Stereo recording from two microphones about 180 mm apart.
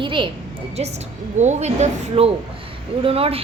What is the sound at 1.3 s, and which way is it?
Speech, 40° right (ahead or behind).